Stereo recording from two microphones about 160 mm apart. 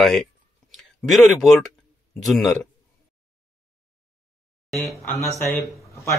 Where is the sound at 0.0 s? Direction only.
5° left (ahead or behind).